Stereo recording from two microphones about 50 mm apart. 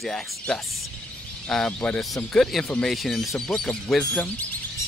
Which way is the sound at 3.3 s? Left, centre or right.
Centre.